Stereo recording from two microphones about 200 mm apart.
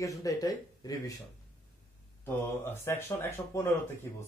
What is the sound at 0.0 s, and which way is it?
Speech, 15° left (ahead or behind).